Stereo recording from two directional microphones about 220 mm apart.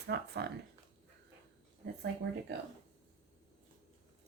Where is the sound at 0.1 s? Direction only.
45° right (ahead or behind).